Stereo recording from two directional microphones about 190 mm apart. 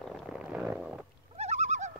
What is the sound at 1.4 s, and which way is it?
Bird, 35° right (ahead or behind).